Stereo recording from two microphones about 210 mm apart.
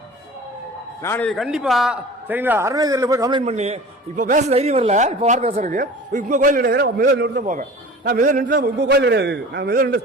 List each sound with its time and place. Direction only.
1.0 s a man's voice: 5° left (ahead or behind); by 3.4 s 20° right (ahead or behind)
3.4 s speech: 30° right (ahead or behind)